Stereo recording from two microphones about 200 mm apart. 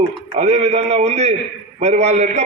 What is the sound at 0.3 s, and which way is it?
A man's voice, 35° right (ahead or behind).